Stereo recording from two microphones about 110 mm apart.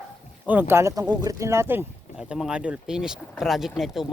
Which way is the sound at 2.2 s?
10° right (ahead or behind).